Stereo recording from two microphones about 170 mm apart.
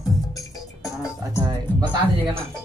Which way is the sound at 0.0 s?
20° left (ahead or behind).